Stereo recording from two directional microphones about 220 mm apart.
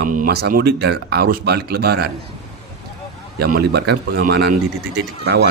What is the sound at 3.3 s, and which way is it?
Speech, 45° right (ahead or behind).